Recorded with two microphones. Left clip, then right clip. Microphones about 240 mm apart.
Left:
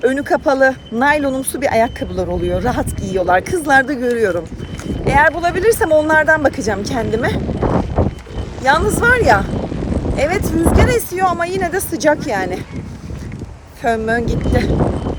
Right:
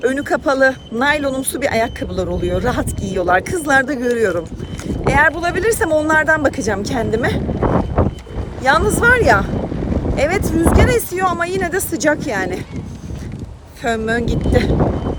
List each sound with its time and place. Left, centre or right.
0.0 s speech: centre
7.6 s a sound: centre
8.6 s speech: centre
13.8 s speech: centre